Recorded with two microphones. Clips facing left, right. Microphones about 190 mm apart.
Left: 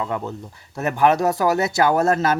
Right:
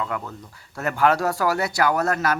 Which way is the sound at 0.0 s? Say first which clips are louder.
Left 3 dB; 25° left (ahead or behind).